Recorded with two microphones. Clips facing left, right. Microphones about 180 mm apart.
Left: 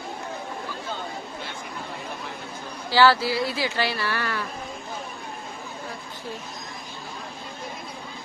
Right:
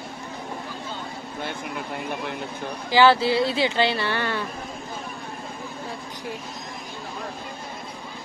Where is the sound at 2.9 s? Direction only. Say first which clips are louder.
Right 2 dB; 20° right (ahead or behind).